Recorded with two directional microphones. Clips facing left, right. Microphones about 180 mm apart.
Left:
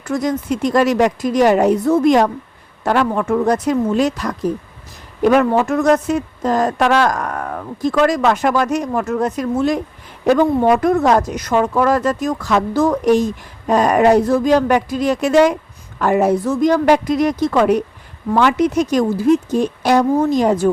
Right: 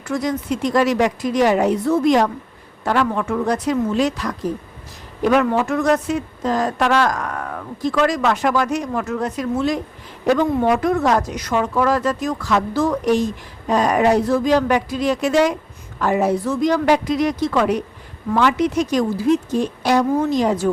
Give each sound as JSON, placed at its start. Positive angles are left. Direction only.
{"t": 0.0, "sound": "speech", "side_deg": 45}